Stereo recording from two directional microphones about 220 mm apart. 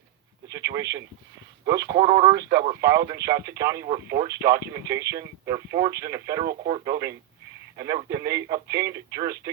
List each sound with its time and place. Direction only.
0.4 s speech: 15° right (ahead or behind)